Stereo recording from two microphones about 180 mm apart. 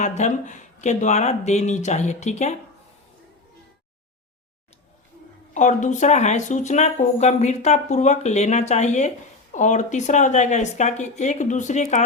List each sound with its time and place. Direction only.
0.0 s speech: 40° left (ahead or behind)
5.5 s speech: 45° left (ahead or behind)